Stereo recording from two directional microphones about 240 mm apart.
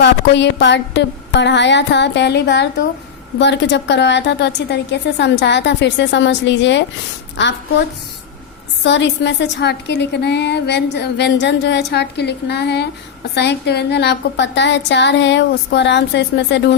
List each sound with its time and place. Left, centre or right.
0.0 s a woman's voice: left
8.8 s a woman's voice: left